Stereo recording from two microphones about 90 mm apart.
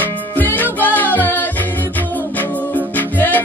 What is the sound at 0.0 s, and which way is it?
Music, 20° left (ahead or behind).